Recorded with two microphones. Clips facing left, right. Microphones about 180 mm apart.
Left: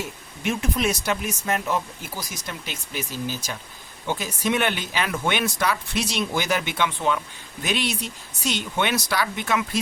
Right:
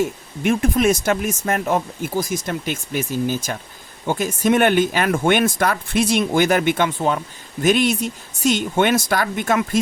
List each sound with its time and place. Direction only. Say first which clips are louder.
0.0 s speech: right 8 dB; 50° right (ahead or behind)